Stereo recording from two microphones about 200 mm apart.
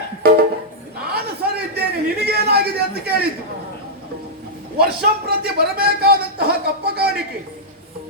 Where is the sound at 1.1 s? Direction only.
50° right (ahead or behind).